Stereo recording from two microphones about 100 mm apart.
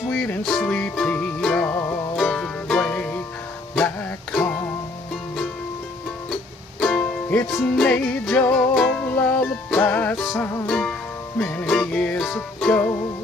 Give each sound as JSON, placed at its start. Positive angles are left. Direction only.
{"t": 0.1, "sound": "music", "side_deg": 10}
{"t": 2.1, "sound": "music", "side_deg": 10}
{"t": 6.8, "sound": "music", "side_deg": 15}
{"t": 8.5, "sound": "music", "side_deg": 5}
{"t": 9.0, "sound": "music", "side_deg": 15}
{"t": 10.1, "sound": "music", "side_deg": 5}
{"t": 11.3, "sound": "speech", "side_deg": 20}
{"t": 11.6, "sound": "music", "side_deg": 5}